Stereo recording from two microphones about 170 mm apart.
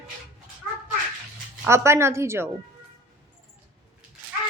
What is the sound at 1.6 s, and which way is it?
Speech, 15° right (ahead or behind).